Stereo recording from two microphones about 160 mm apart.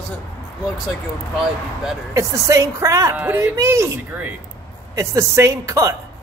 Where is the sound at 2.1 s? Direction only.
20° right (ahead or behind).